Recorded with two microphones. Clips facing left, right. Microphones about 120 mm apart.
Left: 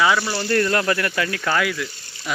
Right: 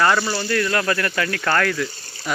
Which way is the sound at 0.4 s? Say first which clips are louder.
Left 1 dB; 30° left (ahead or behind).